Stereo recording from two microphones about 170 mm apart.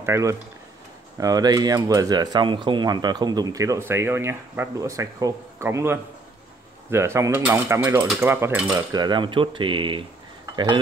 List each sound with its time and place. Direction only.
0.0 s cutlery: 15° right (ahead or behind)
1.2 s speech: 20° right (ahead or behind)
6.9 s cutlery: 15° right (ahead or behind)
8.9 s speech: 25° right (ahead or behind)
10.5 s cutlery: 25° right (ahead or behind)